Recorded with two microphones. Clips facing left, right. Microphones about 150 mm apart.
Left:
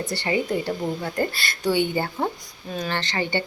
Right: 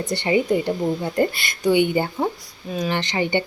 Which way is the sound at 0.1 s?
20° right (ahead or behind).